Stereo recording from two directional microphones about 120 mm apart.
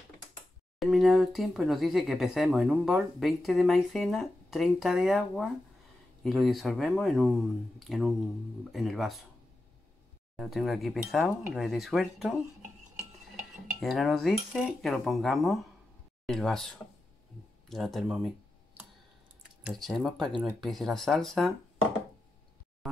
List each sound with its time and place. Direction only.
0.7 s speech: centre (ahead or behind)
10.3 s speech: centre (ahead or behind)
13.7 s speech: centre (ahead or behind)
17.6 s speech: centre (ahead or behind)
19.7 s speech: centre (ahead or behind)